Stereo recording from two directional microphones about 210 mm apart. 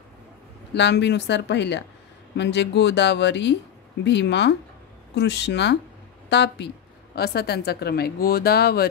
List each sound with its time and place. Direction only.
0.7 s a woman's voice: 55° left (ahead or behind)